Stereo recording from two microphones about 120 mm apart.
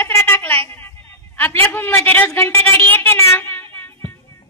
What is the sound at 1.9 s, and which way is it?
A woman's voice, 15° left (ahead or behind).